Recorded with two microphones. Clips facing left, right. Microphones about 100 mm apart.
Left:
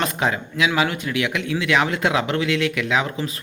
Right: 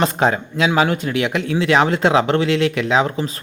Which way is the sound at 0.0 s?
35° right (ahead or behind).